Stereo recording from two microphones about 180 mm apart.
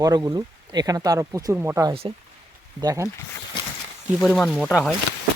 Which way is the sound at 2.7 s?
20° right (ahead or behind).